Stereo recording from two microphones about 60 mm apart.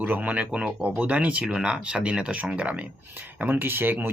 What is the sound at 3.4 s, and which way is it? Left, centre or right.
Speech, right.